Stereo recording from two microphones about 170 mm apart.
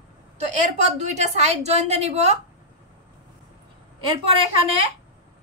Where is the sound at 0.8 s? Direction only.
45° right (ahead or behind).